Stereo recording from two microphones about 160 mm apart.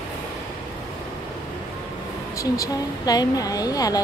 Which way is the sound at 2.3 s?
20° left (ahead or behind).